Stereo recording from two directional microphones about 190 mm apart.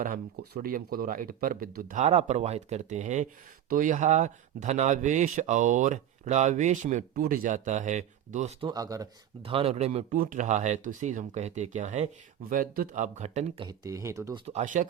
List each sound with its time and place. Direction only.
0.0 s speech: 50° right (ahead or behind)
8.6 s speech: 20° right (ahead or behind)
9.4 s speech: 30° right (ahead or behind)
13.7 s speech: 20° right (ahead or behind)
14.4 s speech: 40° right (ahead or behind)